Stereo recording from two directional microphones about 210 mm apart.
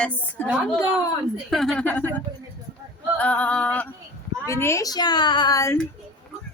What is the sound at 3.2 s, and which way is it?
A woman's voice, 5° left (ahead or behind).